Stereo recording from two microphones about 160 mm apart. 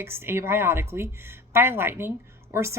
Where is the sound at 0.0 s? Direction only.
15° right (ahead or behind).